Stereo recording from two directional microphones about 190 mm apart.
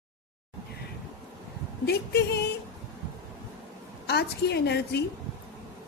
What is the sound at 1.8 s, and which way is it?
Speech, 60° left (ahead or behind).